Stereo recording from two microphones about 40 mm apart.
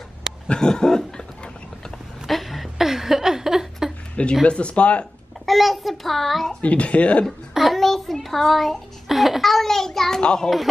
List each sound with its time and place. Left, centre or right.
0.5 s a child's voice: centre
2.2 s a sound: centre
4.5 s speech: left
5.4 s a child's voice: centre
6.6 s speech: left
7.5 s a child's voice: centre
9.0 s a child's voice: centre
10.2 s a child's voice: centre